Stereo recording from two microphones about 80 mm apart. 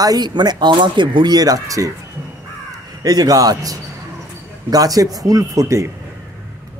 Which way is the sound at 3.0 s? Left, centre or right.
Right.